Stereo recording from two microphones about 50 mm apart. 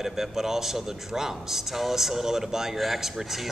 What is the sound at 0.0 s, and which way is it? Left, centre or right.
Speech, centre.